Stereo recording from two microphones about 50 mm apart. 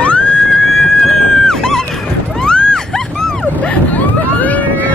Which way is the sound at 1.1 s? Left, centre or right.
Centre.